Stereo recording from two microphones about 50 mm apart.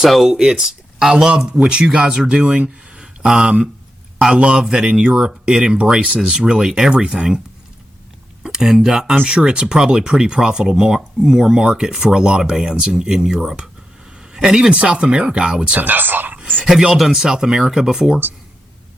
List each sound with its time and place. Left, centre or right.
0.0 s speech: centre
0.3 s speech: centre
8.4 s speech: centre
15.8 s speech: right
16.6 s speech: centre